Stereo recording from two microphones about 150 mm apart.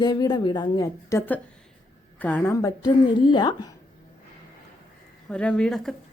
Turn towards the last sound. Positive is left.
turn(degrees=5)  # may be behind; listen again after turning